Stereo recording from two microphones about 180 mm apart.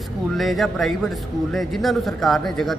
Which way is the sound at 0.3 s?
Centre (ahead or behind).